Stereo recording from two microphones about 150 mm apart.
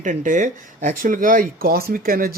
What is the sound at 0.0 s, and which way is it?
Speech, 55° right (ahead or behind).